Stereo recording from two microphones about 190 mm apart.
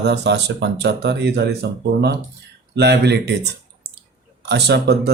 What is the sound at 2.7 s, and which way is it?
Speech, 60° right (ahead or behind).